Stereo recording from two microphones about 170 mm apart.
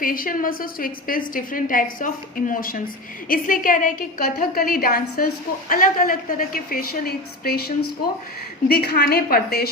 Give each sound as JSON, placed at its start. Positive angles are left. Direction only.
{"t": 0.0, "sound": "a woman's voice", "side_deg": 55}